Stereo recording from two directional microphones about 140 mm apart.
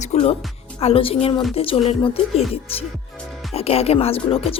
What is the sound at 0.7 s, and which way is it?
Speech, 40° left (ahead or behind).